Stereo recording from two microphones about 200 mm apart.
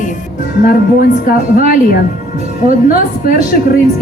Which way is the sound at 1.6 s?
45° left (ahead or behind).